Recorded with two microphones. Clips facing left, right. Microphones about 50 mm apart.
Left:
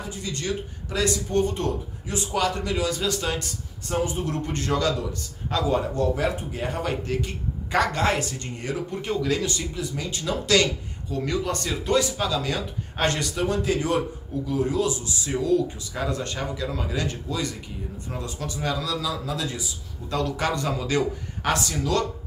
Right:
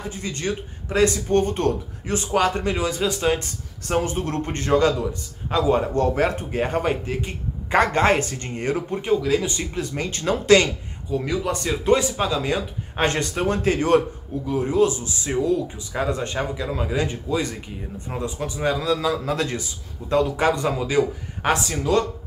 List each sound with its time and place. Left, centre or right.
0.1 s a man's voice: right
3.8 s speech: right
5.9 s speech: right
7.1 s a man's voice: right
9.0 s a man's voice: centre
9.8 s speech: right
11.1 s a man's voice: centre
11.8 s speech: right
14.4 s speech: right
20.2 s speech: right